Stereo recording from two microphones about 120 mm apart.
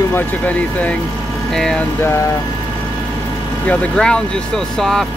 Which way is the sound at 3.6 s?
10° left (ahead or behind).